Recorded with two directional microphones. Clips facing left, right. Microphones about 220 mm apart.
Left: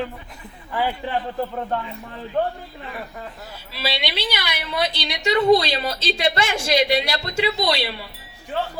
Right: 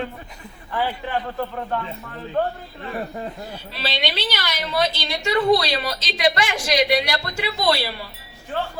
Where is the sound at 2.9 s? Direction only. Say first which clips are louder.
Right 7 dB; 30° right (ahead or behind).